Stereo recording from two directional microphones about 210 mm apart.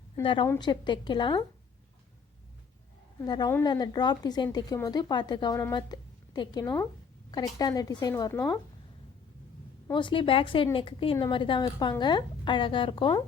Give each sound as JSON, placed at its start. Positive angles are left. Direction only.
{"t": 0.2, "sound": "a woman's voice", "side_deg": 25}
{"t": 3.2, "sound": "a woman's voice", "side_deg": 20}
{"t": 9.8, "sound": "a woman's voice", "side_deg": 20}